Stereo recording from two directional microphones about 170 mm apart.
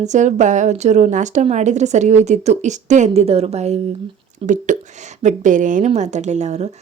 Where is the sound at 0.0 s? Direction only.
45° right (ahead or behind).